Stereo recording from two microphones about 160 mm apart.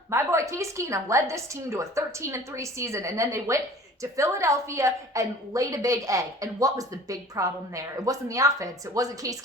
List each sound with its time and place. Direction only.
0.1 s a woman's voice: 20° right (ahead or behind)